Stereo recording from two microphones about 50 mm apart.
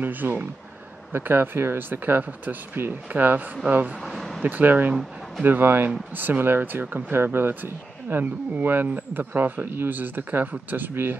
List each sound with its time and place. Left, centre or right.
0.0 s speech: right
4.0 s speech: centre
4.4 s speech: right